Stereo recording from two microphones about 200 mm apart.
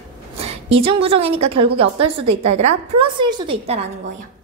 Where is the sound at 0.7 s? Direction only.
30° right (ahead or behind).